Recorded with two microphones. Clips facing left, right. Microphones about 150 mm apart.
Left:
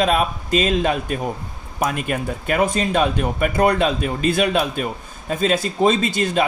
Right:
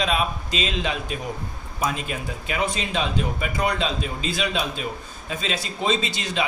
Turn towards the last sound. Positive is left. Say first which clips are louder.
# left 7 dB
turn(degrees=50)  # may be behind; listen again after turning